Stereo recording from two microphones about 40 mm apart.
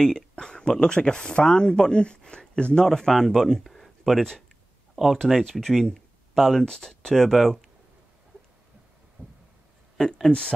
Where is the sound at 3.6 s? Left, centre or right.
Centre.